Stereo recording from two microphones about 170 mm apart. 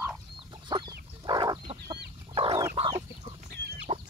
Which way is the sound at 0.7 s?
30° right (ahead or behind).